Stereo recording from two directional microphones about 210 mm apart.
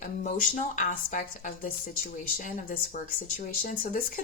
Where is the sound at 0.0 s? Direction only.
40° left (ahead or behind).